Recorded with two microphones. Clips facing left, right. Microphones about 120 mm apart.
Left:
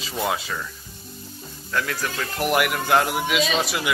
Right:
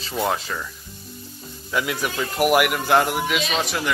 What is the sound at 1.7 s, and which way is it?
A man's voice, 15° right (ahead or behind).